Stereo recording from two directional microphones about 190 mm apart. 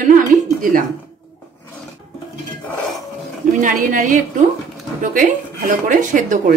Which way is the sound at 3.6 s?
45° right (ahead or behind).